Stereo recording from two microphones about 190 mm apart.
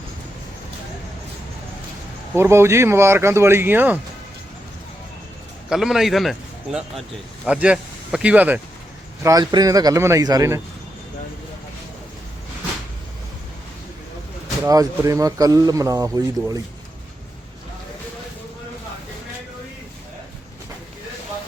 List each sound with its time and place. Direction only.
2.3 s speech: 15° right (ahead or behind)
5.6 s a man's voice: centre (ahead or behind)
9.2 s a man's voice: 20° right (ahead or behind)
14.6 s speech: 20° right (ahead or behind)